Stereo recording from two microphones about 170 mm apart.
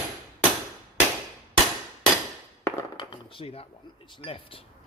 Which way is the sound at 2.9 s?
30° left (ahead or behind).